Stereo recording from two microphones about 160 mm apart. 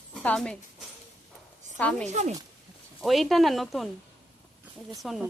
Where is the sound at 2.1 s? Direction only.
45° right (ahead or behind).